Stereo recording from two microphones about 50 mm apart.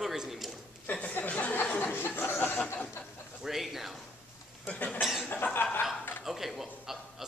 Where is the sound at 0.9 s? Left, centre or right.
Left.